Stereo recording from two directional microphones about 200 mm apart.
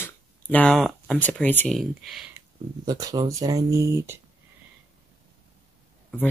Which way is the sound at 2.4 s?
20° right (ahead or behind).